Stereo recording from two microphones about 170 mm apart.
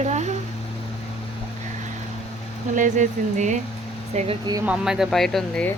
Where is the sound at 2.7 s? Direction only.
50° right (ahead or behind).